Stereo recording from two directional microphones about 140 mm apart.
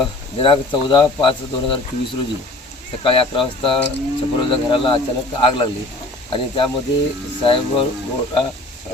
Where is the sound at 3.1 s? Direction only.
40° left (ahead or behind).